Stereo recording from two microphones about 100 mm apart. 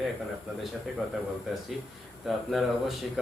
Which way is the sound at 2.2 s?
Centre (ahead or behind).